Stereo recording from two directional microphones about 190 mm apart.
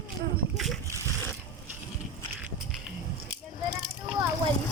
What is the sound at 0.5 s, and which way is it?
Splash, centre (ahead or behind).